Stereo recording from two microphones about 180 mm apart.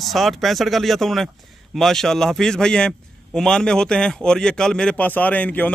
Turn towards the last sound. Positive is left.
turn(degrees=10)  # may be behind; listen again after turning